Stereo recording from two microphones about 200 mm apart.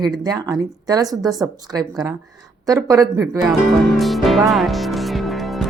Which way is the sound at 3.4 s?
Centre (ahead or behind).